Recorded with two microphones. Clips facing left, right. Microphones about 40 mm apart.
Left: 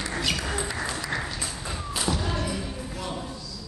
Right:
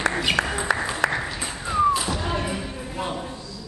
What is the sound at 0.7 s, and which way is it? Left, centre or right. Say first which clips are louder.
Applause: right 9 dB; right.